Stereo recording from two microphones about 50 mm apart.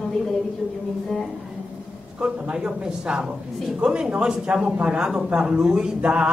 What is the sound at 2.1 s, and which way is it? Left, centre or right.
Speech, centre.